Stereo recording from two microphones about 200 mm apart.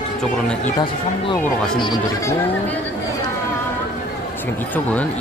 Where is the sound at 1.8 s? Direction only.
20° left (ahead or behind).